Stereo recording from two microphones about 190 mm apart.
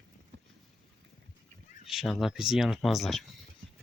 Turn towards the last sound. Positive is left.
turn(degrees=0)  # may be behind; listen again after turning